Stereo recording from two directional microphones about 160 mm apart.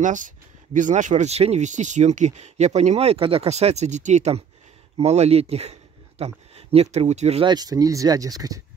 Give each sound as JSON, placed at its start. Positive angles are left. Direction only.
{"t": 0.0, "sound": "speech", "side_deg": -55}
{"t": 7.4, "sound": "speech", "side_deg": -25}